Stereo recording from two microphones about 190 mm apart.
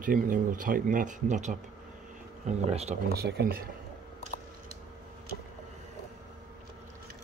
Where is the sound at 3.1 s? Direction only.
55° right (ahead or behind).